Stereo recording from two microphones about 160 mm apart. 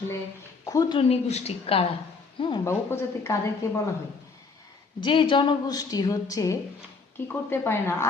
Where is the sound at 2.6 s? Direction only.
15° left (ahead or behind).